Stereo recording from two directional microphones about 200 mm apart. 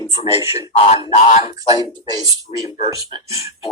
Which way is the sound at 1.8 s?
20° right (ahead or behind).